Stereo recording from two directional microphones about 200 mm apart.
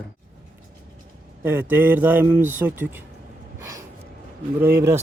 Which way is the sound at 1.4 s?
10° right (ahead or behind).